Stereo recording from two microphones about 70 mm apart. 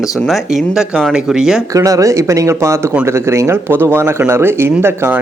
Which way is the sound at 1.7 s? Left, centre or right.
Right.